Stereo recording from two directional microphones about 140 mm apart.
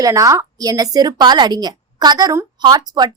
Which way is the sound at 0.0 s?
25° right (ahead or behind).